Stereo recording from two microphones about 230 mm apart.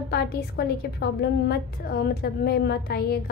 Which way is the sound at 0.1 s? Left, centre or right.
Left.